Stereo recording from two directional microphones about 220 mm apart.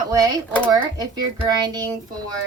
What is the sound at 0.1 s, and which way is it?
Speech, 15° right (ahead or behind).